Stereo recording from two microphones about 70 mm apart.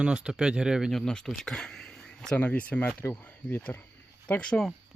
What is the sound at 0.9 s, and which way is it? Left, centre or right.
Speech, centre.